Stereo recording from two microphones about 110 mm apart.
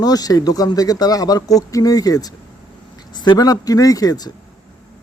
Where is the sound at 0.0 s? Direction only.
35° left (ahead or behind).